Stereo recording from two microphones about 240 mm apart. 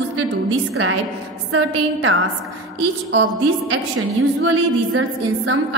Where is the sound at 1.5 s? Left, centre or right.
Right.